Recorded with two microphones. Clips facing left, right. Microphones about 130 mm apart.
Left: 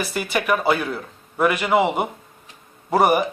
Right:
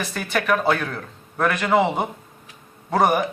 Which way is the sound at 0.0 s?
10° left (ahead or behind).